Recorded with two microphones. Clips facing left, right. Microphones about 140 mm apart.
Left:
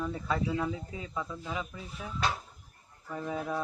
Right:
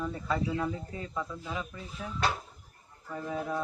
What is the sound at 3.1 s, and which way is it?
Speech, 5° left (ahead or behind).